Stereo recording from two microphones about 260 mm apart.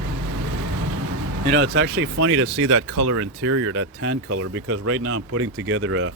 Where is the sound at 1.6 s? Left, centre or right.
Right.